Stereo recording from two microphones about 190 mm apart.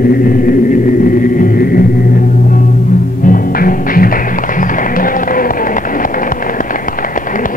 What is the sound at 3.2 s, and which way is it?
Music, 50° left (ahead or behind).